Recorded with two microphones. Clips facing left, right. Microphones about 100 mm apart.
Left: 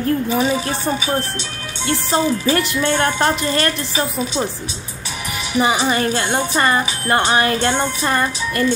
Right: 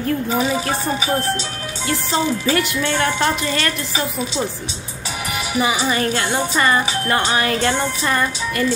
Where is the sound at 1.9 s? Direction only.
30° left (ahead or behind).